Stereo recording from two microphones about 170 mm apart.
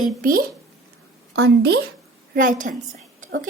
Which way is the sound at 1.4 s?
80° right.